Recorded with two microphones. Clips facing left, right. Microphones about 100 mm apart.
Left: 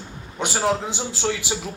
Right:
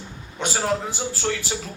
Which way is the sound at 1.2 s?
15° left (ahead or behind).